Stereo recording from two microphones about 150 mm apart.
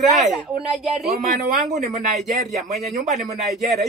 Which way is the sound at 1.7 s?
50° right (ahead or behind).